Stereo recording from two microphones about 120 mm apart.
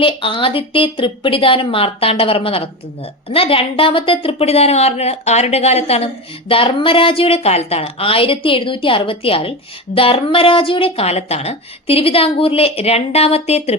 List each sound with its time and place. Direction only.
0.0 s a woman's voice: 45° left (ahead or behind)
6.5 s speech: 50° left (ahead or behind)